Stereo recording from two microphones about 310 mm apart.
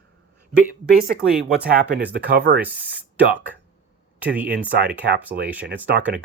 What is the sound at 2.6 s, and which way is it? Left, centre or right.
Speech, centre.